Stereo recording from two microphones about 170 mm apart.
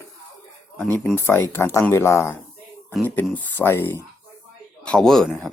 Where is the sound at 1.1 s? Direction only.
15° left (ahead or behind).